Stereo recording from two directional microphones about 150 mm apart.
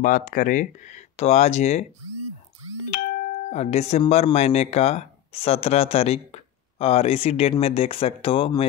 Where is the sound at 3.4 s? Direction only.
50° left (ahead or behind).